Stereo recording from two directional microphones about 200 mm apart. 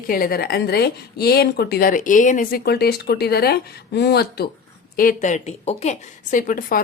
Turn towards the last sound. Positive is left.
turn(degrees=45)  # may be behind; listen again after turning